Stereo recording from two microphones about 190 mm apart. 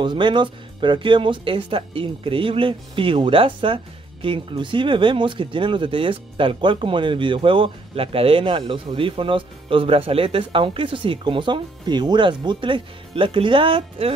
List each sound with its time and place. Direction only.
0.0 s speech: 25° right (ahead or behind)